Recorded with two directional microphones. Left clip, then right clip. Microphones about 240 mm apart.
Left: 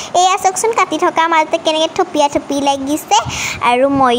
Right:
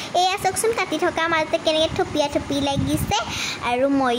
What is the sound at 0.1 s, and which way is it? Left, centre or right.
Speech, left.